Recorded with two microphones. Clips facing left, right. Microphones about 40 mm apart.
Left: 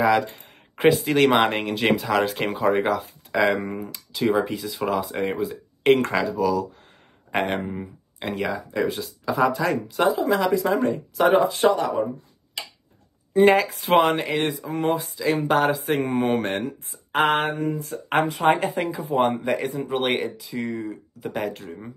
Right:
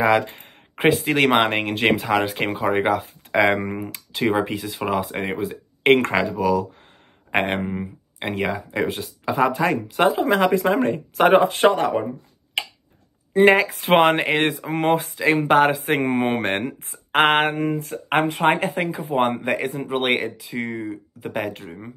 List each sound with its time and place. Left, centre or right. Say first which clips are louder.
0.0 s speech: right 1 dB; right
12.6 s tick-tock: right 8 dB; right
13.3 s speech: right 2 dB; right
15.2 s speech: right 4 dB; right
19.2 s speech: right 1 dB; right